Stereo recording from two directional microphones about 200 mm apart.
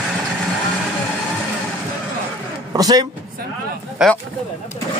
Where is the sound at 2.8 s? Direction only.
20° right (ahead or behind).